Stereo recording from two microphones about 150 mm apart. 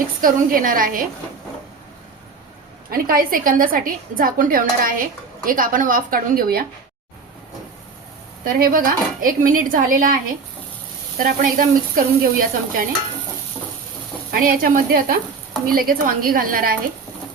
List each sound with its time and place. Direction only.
0.2 s speech: 70° right (ahead or behind)
2.9 s speech: 75° right (ahead or behind)
8.5 s speech: 70° right (ahead or behind)
14.3 s speech: 70° right (ahead or behind)